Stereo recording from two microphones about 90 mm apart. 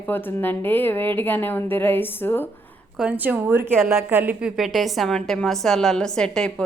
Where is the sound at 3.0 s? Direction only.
15° right (ahead or behind).